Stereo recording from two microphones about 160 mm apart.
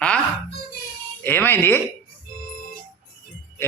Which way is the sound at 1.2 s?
15° left (ahead or behind).